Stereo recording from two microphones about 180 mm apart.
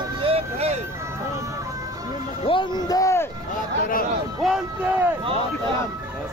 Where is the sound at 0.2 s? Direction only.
35° right (ahead or behind).